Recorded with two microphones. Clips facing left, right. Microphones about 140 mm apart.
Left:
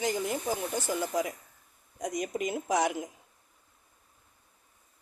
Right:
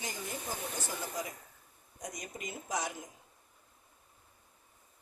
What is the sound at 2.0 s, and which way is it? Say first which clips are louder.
A woman's voice: left 11 dB; 75° left (ahead or behind).